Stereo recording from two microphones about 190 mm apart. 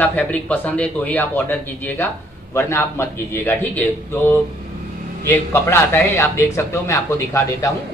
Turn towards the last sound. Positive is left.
turn(degrees=15)  # may be behind; listen again after turning